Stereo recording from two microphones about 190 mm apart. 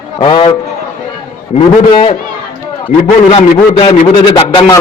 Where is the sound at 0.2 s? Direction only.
30° left (ahead or behind).